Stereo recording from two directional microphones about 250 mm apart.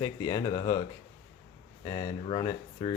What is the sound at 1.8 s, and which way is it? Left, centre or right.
Speech, centre.